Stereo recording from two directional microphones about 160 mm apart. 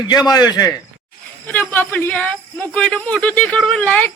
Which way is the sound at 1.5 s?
10° left (ahead or behind).